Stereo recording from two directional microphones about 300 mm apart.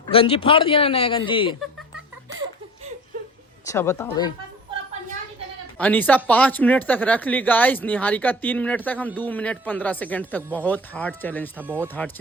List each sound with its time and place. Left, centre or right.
0.1 s speech: centre
3.7 s speech: centre
5.8 s speech: centre
11.5 s speech: centre